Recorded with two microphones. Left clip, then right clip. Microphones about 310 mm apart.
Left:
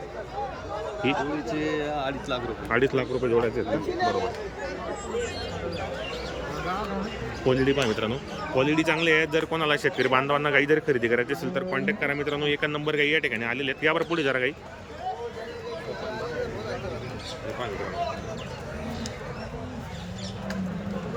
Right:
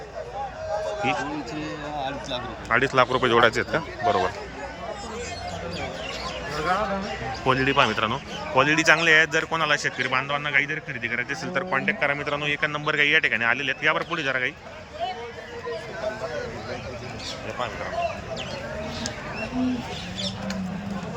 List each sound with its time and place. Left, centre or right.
2.0 s a man's voice: centre
3.2 s speech: right
7.4 s a man's voice: centre